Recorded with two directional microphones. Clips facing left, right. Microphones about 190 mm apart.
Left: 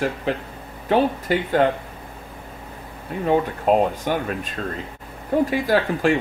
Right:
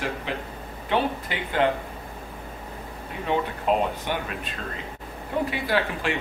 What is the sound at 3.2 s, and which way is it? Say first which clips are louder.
A man's voice: left 5 dB; 45° left (ahead or behind).